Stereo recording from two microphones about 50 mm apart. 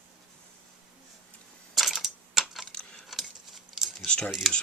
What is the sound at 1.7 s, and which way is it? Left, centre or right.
Typing, centre.